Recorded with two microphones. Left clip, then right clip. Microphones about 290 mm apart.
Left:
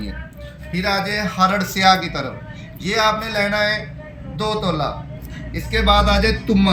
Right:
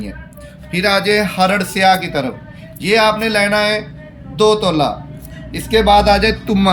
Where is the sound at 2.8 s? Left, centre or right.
Right.